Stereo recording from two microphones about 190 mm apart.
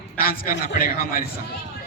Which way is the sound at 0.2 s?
50° left (ahead or behind).